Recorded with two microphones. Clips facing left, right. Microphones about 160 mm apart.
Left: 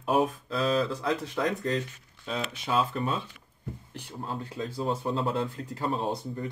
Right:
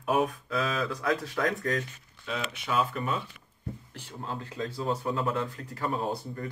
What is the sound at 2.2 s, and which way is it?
Speech, 30° left (ahead or behind).